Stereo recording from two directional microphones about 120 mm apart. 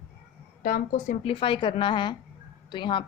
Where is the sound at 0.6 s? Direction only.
90° left.